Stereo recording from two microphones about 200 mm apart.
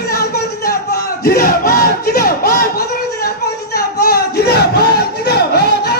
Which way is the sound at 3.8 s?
50° left (ahead or behind).